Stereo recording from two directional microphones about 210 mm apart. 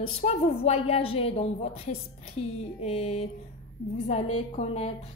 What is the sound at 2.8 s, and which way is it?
Speech, 30° left (ahead or behind).